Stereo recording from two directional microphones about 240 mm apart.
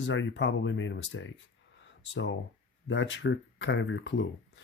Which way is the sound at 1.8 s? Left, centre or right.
Left.